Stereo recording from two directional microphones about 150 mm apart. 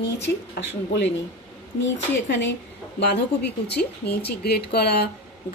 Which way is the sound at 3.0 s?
90° left.